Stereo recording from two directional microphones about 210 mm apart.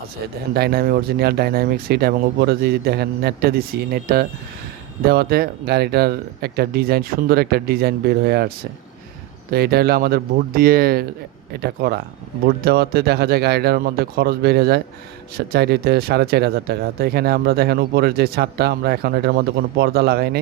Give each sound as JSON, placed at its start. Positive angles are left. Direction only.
{"t": 0.5, "sound": "speech", "side_deg": -45}
{"t": 9.5, "sound": "speech", "side_deg": -45}